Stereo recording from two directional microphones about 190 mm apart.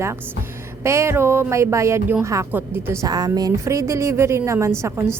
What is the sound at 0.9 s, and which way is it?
A woman's voice, 15° right (ahead or behind).